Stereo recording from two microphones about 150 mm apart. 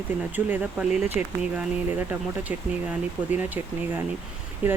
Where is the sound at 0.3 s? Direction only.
10° right (ahead or behind).